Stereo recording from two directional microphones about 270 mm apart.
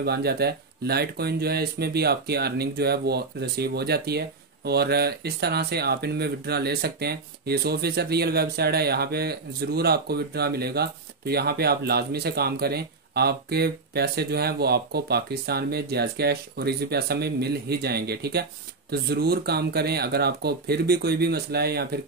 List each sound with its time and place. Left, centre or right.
0.0 s speech: right